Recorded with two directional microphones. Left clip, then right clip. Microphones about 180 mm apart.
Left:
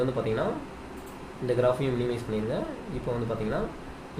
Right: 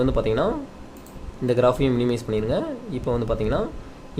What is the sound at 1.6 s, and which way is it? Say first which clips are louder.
Speech: right 6 dB; 60° right (ahead or behind).